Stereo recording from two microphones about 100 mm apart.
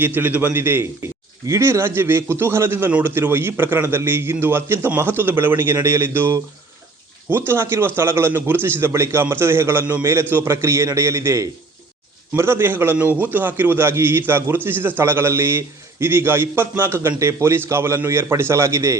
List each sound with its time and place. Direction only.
0.0 s a man's voice: 20° right (ahead or behind)